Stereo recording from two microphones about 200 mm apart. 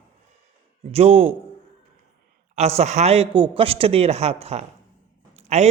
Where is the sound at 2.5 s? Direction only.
30° right (ahead or behind).